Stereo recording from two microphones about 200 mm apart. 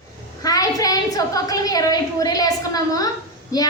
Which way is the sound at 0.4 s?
20° left (ahead or behind).